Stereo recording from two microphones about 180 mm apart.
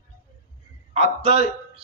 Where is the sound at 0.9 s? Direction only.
35° right (ahead or behind).